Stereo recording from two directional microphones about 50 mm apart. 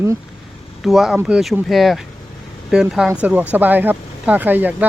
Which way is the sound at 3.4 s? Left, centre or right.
Right.